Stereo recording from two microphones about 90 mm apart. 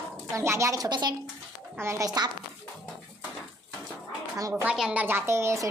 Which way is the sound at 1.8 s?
30° right (ahead or behind).